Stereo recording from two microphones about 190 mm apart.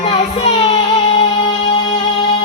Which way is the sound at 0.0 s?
30° left (ahead or behind).